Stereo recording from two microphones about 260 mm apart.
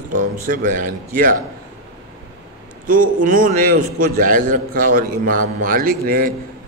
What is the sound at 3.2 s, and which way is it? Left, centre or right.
A man's voice, right.